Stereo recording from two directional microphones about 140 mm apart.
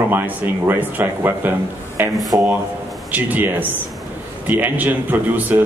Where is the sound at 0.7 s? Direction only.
15° right (ahead or behind).